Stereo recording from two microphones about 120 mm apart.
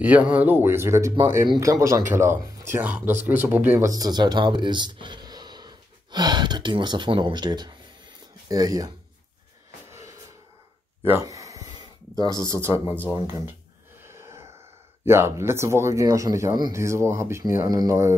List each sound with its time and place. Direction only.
0.0 s speech: 15° right (ahead or behind)
3.8 s speech: 30° right (ahead or behind)
9.8 s a sound: 20° right (ahead or behind)
12.5 s speech: 20° right (ahead or behind)
14.0 s a sound: 20° right (ahead or behind)
15.0 s speech: 20° right (ahead or behind)